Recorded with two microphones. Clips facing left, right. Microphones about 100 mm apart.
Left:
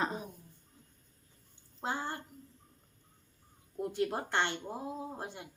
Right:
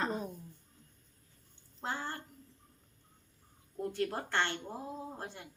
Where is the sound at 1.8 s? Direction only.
15° left (ahead or behind).